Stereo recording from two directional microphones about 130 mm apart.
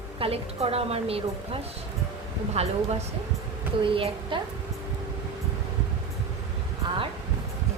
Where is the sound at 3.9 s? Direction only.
45° right (ahead or behind).